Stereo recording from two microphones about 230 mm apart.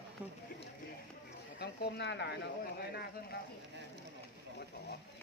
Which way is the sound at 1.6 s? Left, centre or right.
Left.